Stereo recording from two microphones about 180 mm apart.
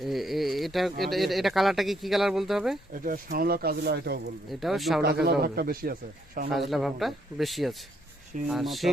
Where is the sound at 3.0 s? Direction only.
55° right (ahead or behind).